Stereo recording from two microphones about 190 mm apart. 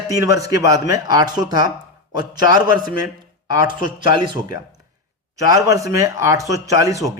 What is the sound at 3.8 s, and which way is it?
A man's voice, 25° right (ahead or behind).